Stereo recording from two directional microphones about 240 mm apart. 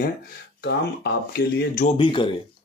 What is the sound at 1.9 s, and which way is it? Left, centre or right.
Speech, centre.